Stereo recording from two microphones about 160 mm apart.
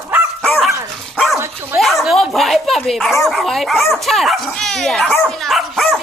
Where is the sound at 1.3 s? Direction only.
15° right (ahead or behind).